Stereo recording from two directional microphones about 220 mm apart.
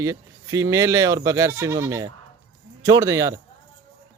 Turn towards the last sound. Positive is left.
turn(degrees=-15)  # may be behind; listen again after turning